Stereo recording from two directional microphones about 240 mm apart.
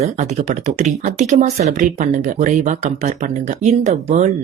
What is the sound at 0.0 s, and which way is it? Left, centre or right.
Speech, right.